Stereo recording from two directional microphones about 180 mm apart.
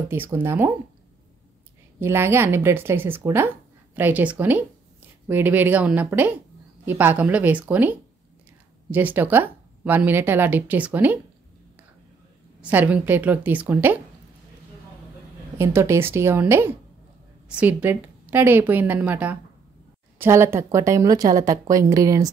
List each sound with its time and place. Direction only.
0.1 s speech: 10° right (ahead or behind)
2.0 s speech: 15° right (ahead or behind)
12.6 s speech: 10° right (ahead or behind)
15.5 s a woman's voice: 15° right (ahead or behind)